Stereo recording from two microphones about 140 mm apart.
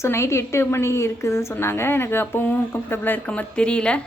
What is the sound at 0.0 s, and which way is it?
A woman's voice, 20° left (ahead or behind).